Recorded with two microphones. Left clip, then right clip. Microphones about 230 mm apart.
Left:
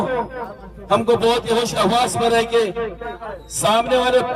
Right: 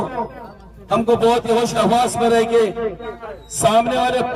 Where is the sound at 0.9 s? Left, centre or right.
Left.